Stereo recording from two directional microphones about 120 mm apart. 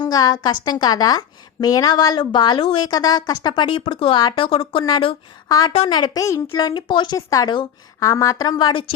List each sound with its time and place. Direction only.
0.0 s a woman's voice: 35° left (ahead or behind)
7.2 s a woman's voice: 30° left (ahead or behind)
8.0 s a woman's voice: 25° left (ahead or behind)